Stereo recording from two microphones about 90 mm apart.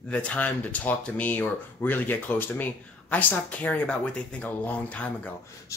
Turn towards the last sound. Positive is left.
turn(degrees=15)  # may be behind; listen again after turning